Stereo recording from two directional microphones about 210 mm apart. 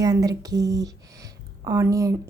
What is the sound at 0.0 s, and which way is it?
Speech, 15° right (ahead or behind).